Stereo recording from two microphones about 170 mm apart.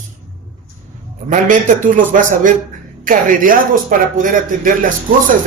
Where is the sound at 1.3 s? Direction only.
45° right (ahead or behind).